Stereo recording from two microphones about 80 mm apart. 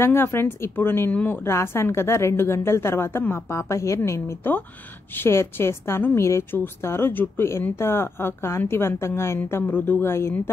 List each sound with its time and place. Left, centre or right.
0.0 s a woman's voice: left
1.5 s a woman's voice: left